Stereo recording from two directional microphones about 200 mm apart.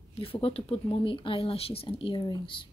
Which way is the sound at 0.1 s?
30° left (ahead or behind).